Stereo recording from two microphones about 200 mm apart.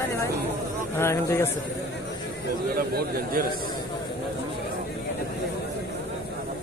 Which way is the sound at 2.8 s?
45° right (ahead or behind).